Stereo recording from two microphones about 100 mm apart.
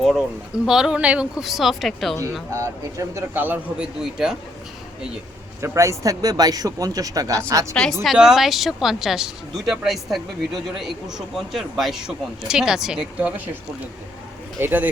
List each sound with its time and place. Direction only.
0.0 s speech: centre (ahead or behind)
2.5 s speech: 35° right (ahead or behind)
3.3 s speech: 20° right (ahead or behind)
4.0 s speech: 5° right (ahead or behind)
5.6 s speech: 30° right (ahead or behind)
7.7 s speech: 5° left (ahead or behind)
8.0 s speech: 5° right (ahead or behind)
11.3 s speech: centre (ahead or behind)
14.6 s speech: 15° right (ahead or behind)